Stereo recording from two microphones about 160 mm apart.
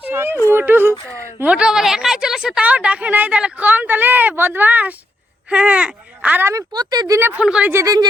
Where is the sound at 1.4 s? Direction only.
5° right (ahead or behind); by 7.2 s 25° right (ahead or behind).